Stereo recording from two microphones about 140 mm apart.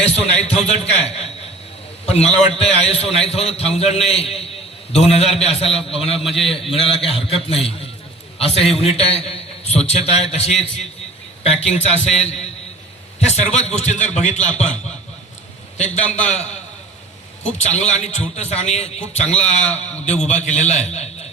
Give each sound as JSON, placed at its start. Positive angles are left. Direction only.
{"t": 0.0, "sound": "a man's voice", "side_deg": 50}
{"t": 6.1, "sound": "a man's voice", "side_deg": 0}
{"t": 6.5, "sound": "a man's voice", "side_deg": 40}
{"t": 16.2, "sound": "a man's voice", "side_deg": 55}